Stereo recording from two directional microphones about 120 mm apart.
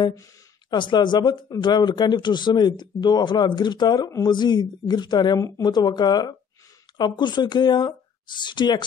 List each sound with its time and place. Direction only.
0.7 s speech: 40° left (ahead or behind)